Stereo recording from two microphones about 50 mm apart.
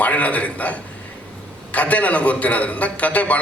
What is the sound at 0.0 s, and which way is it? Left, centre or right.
A man's voice, left.